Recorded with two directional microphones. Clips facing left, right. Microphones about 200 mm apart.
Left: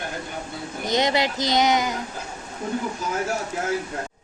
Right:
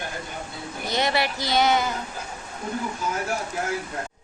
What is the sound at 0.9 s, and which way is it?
A woman's voice, 20° left (ahead or behind).